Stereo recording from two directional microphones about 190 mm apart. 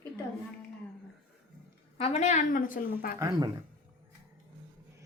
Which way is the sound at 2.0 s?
35° left (ahead or behind).